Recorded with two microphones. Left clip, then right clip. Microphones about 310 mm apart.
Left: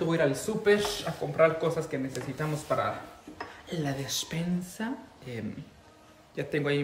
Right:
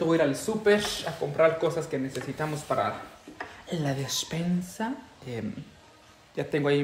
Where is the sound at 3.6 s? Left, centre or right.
Centre.